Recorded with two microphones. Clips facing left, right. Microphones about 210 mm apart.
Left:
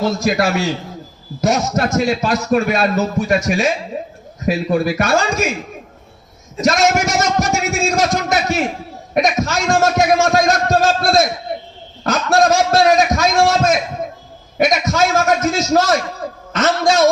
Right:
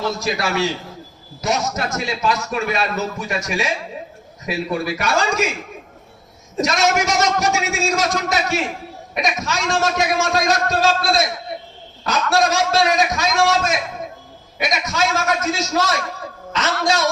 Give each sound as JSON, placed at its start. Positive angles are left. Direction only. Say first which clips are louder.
{"t": 0.2, "sound": "speech", "louder": "left 4 dB", "side_deg": 45}
{"t": 6.7, "sound": "a man's voice", "louder": "left 5 dB", "side_deg": 50}